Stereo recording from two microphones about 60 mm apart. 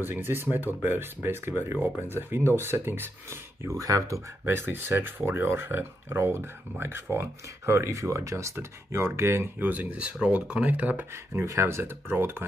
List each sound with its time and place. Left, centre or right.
0.0 s speech: right
3.6 s speech: right
4.5 s speech: right
9.7 s speech: right
11.4 s speech: right